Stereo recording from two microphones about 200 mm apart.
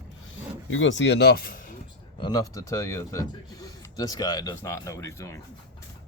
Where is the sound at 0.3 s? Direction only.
75° left (ahead or behind); by 1.8 s 45° left (ahead or behind).